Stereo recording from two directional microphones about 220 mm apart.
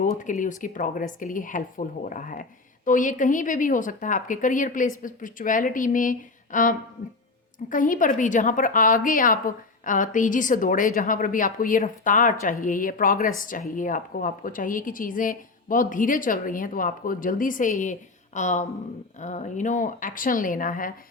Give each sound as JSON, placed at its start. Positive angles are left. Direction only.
{"t": 0.0, "sound": "a woman's voice", "side_deg": 35}